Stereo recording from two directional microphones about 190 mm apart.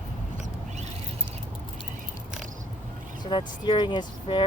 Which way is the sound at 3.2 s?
25° left (ahead or behind).